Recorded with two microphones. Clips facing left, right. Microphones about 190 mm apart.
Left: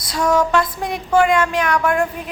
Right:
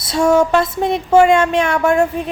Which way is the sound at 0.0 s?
25° right (ahead or behind).